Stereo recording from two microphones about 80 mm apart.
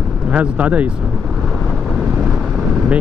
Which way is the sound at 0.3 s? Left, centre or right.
Centre.